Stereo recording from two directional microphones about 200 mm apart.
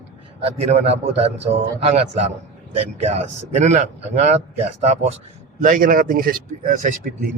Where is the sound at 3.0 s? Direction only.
35° right (ahead or behind).